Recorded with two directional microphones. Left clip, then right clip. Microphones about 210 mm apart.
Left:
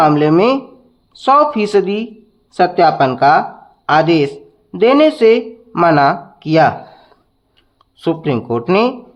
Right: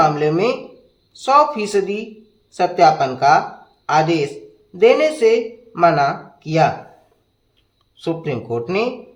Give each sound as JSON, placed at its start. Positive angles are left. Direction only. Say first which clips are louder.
{"t": 0.0, "sound": "speech", "louder": "left 5 dB", "side_deg": 30}
{"t": 7.9, "sound": "speech", "louder": "left 6 dB", "side_deg": 30}